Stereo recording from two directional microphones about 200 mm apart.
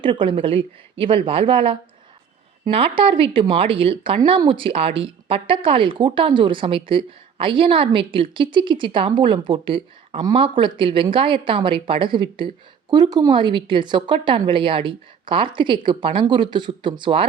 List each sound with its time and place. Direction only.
0.0 s speech: 25° right (ahead or behind)